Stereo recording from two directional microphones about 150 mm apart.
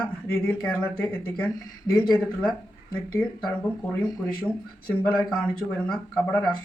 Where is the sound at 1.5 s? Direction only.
25° left (ahead or behind).